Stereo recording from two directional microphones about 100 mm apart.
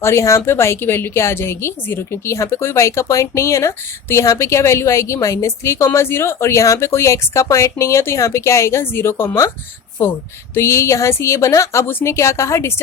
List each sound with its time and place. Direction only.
0.0 s a woman's voice: 30° left (ahead or behind)